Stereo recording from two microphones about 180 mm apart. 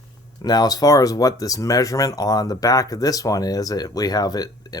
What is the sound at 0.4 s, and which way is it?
Speech, 20° left (ahead or behind).